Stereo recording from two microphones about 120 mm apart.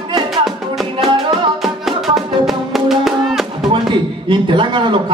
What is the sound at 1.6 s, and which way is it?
Music, centre (ahead or behind).